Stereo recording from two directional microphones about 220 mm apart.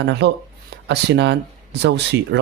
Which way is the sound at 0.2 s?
50° right (ahead or behind).